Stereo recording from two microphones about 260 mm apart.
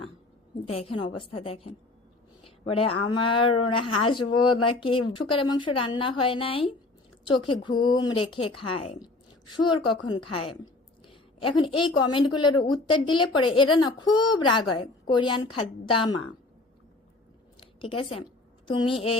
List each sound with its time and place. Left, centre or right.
0.6 s speech: left
2.4 s a sound: left
2.8 s speech: left
3.1 s speech: centre
9.9 s a woman's voice: centre
17.6 s a sound: centre
18.7 s speech: centre